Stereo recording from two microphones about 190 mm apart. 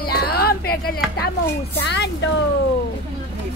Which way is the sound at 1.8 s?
65° left (ahead or behind).